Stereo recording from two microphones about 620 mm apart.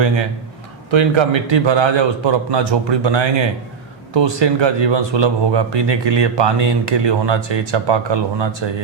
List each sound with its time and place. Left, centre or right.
0.9 s speech: right